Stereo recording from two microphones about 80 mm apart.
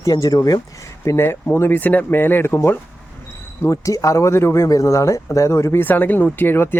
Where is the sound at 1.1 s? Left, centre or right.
Left.